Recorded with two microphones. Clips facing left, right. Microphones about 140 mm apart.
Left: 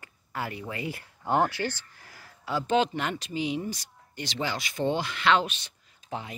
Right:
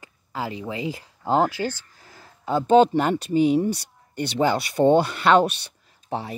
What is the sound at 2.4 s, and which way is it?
Speech, 40° right (ahead or behind).